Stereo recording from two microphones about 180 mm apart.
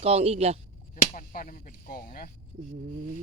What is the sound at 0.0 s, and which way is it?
Speech, 35° right (ahead or behind).